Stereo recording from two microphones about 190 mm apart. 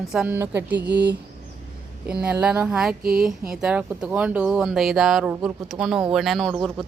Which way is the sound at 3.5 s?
5° right (ahead or behind).